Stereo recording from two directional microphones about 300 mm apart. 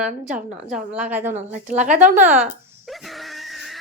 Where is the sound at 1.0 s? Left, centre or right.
Centre.